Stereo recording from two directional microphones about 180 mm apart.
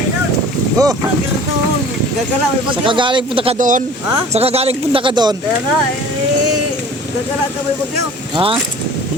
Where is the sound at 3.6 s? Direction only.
45° right (ahead or behind).